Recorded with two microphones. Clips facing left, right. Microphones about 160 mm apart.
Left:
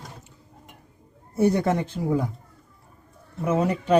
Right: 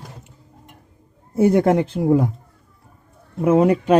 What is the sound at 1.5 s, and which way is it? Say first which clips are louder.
Speech: right 7 dB; 90° right.